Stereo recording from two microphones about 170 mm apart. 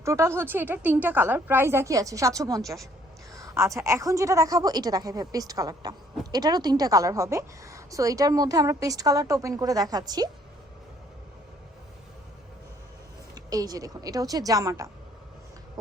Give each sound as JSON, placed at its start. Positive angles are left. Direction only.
{"t": 0.0, "sound": "a woman's voice", "side_deg": -15}
{"t": 13.3, "sound": "a woman's voice", "side_deg": -20}